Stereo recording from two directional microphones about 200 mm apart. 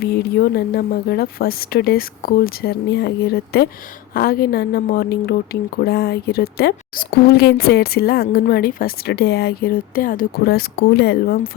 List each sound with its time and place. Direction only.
0.0 s a woman's voice: 55° left (ahead or behind)